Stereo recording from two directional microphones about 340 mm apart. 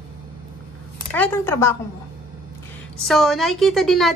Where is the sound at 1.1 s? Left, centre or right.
Centre.